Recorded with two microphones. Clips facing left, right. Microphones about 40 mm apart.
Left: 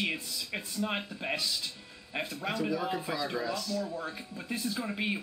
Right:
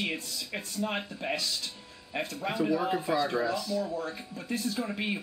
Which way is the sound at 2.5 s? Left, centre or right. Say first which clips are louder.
Right 5 dB; centre.